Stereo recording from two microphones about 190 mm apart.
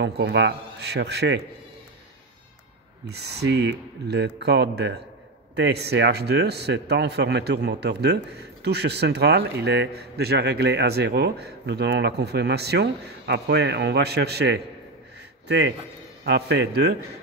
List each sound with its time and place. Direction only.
0.0 s a man's voice: 65° right (ahead or behind)
3.1 s a man's voice: 60° right (ahead or behind)